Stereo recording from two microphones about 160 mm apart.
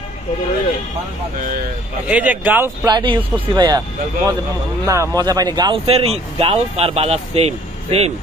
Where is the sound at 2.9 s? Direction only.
25° right (ahead or behind).